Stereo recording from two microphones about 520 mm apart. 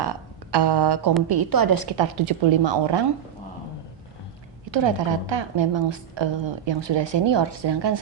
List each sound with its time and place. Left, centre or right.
0.0 s a woman's voice: right
4.7 s a woman's voice: right